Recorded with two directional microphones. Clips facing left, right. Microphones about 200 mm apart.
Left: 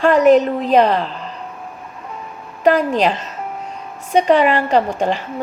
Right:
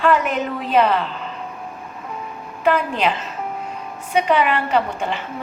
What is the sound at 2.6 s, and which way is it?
A woman's voice, 40° left (ahead or behind).